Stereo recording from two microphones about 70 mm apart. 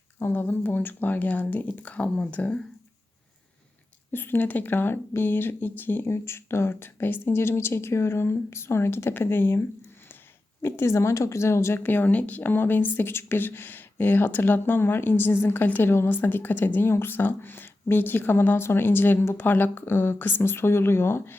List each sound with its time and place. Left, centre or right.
0.2 s speech: left
4.1 s speech: left
15.9 s speech: left